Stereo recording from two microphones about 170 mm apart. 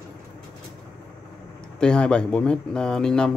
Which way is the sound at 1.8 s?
5° left (ahead or behind).